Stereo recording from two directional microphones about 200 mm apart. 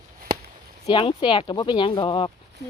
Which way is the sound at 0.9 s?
25° left (ahead or behind).